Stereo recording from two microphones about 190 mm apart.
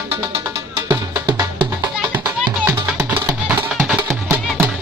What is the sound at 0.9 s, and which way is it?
Music, 25° right (ahead or behind).